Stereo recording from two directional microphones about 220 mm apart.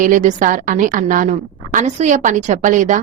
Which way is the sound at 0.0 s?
35° right (ahead or behind).